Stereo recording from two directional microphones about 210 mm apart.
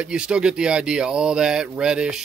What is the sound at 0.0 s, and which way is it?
Speech, 5° right (ahead or behind).